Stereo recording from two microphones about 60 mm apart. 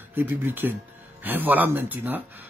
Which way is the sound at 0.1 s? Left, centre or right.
Right.